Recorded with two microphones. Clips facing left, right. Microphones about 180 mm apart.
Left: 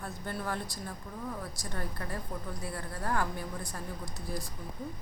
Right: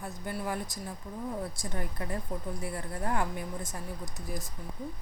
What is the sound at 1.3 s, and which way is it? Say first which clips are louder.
Speech: right 4 dB; 25° right (ahead or behind).